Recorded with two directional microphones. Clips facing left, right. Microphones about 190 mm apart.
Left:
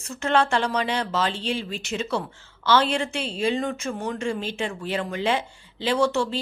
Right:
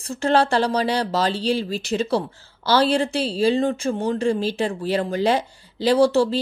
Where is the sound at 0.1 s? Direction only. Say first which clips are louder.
Right 3 dB; 35° right (ahead or behind).